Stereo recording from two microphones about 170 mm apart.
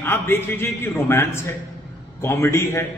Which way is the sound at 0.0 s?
15° left (ahead or behind).